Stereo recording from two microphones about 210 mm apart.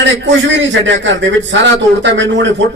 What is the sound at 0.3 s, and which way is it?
A man's voice, 60° right (ahead or behind).